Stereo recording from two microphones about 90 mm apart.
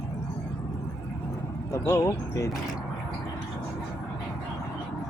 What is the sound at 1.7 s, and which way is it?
Speech, 35° left (ahead or behind).